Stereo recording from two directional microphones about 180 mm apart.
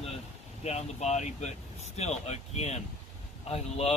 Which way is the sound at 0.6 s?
35° left (ahead or behind).